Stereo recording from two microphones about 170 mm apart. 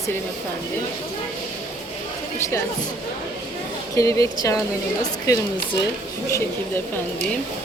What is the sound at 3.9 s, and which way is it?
A woman's voice, 20° left (ahead or behind).